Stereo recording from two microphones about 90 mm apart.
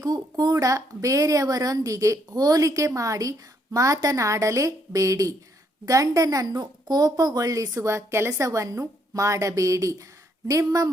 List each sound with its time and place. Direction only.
0.0 s speech: 45° right (ahead or behind)